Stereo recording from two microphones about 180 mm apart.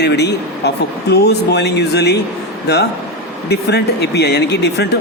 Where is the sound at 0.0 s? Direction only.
70° left (ahead or behind).